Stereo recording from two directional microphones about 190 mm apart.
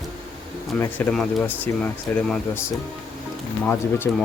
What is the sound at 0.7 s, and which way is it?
Speech, 5° left (ahead or behind).